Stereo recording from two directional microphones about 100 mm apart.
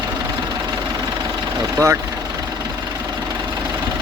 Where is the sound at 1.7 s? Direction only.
30° right (ahead or behind).